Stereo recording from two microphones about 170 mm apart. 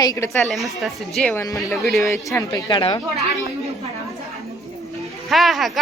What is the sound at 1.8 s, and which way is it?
Speech, centre (ahead or behind).